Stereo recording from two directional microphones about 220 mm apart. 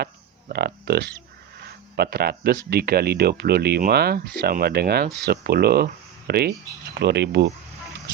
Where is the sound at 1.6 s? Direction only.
45° right (ahead or behind).